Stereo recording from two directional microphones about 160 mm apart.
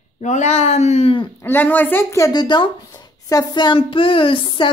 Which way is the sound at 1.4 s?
10° left (ahead or behind).